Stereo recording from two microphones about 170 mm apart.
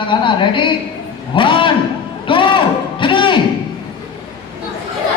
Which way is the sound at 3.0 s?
30° left (ahead or behind).